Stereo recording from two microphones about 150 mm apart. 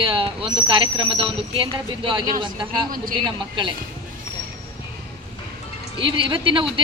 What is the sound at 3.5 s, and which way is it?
Speech, 30° right (ahead or behind).